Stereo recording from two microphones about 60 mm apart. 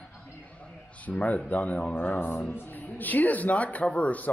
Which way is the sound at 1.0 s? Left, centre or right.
Left.